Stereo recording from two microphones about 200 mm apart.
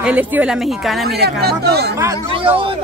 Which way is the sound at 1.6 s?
55° right (ahead or behind).